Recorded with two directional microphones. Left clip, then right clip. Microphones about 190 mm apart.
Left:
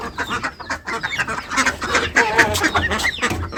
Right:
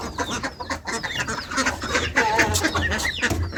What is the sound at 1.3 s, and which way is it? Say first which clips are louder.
Duck: left 5 dB; 50° left (ahead or behind).